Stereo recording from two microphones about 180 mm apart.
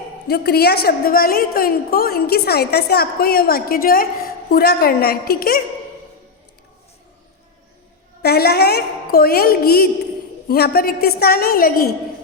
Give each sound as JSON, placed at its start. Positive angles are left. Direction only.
{"t": 0.3, "sound": "a woman's voice", "side_deg": 60}
{"t": 8.2, "sound": "a woman's voice", "side_deg": 60}